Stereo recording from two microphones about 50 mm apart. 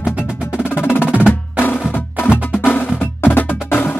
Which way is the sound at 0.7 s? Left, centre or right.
Left.